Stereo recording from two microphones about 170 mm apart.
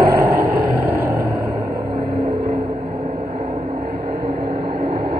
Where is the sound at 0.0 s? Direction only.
65° right (ahead or behind).